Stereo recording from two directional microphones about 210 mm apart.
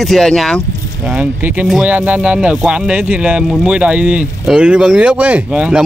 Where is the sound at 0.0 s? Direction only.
Centre (ahead or behind).